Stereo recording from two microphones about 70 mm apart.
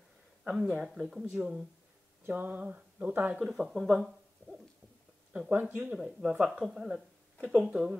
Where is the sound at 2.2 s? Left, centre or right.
Right.